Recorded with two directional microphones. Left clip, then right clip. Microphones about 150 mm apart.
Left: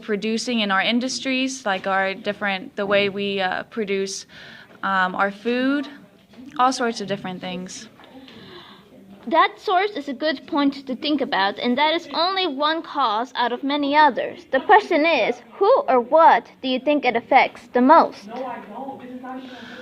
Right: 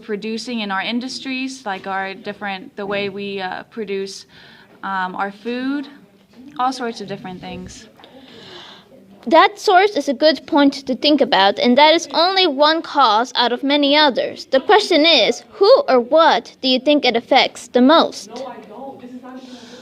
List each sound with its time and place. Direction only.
0.1 s a woman's voice: 30° left (ahead or behind)
9.3 s a woman's voice: 55° right (ahead or behind)